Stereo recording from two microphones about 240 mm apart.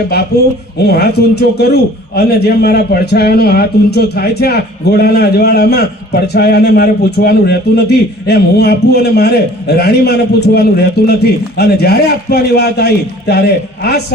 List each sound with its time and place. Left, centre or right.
0.3 s a man's voice: left